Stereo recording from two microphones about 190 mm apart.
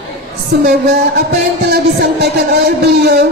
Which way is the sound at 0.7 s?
55° right (ahead or behind).